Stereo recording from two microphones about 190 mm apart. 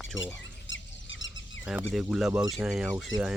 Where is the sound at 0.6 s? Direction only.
80° left.